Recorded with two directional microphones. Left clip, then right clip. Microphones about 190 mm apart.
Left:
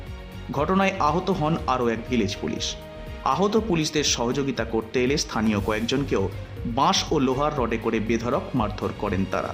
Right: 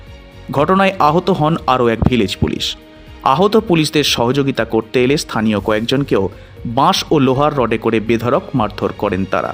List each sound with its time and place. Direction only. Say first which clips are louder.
0.5 s speech: right 10 dB; 40° right (ahead or behind)